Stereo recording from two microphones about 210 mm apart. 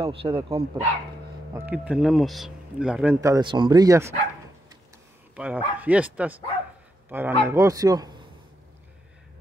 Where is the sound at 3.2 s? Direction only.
20° right (ahead or behind).